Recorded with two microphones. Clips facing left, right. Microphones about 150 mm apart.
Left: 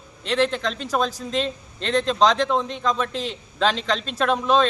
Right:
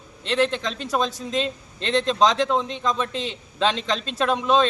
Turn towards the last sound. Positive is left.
turn(degrees=0)  # may be behind; listen again after turning